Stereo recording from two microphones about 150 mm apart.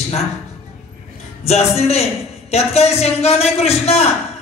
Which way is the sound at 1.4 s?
45° left (ahead or behind).